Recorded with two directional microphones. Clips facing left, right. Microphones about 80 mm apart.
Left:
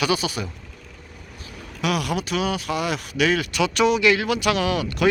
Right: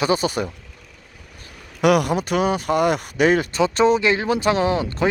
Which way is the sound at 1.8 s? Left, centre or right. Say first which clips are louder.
Right 7 dB; right.